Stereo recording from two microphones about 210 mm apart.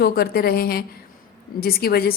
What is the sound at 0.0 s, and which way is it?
A woman's voice, 50° left (ahead or behind).